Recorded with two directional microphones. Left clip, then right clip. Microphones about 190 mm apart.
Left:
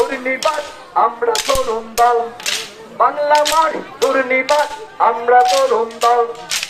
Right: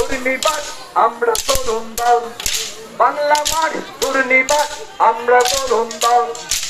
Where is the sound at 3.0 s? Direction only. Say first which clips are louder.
Left 1 dB; 40° right (ahead or behind).